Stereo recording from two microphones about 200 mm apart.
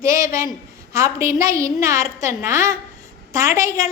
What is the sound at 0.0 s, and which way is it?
A woman's voice, 15° right (ahead or behind).